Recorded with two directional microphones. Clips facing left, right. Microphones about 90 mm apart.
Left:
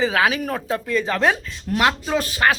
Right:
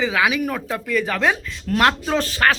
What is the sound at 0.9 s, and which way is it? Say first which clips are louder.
Speech: even; 20° left (ahead or behind).